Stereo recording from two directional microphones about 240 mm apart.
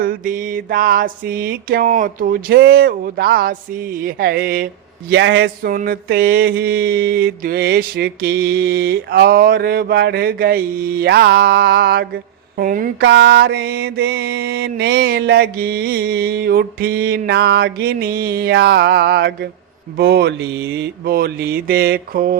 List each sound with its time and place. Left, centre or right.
0.0 s mantra: right